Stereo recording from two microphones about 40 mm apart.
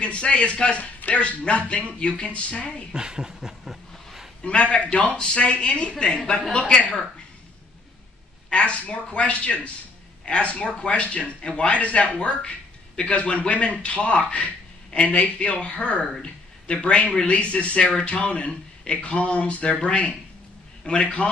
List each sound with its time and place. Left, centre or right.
0.0 s speech: left
2.9 s speech: centre
3.3 s a sound: centre
4.4 s speech: left
8.5 s speech: left